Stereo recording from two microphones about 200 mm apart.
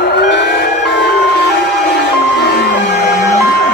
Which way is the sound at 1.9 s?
55° left (ahead or behind).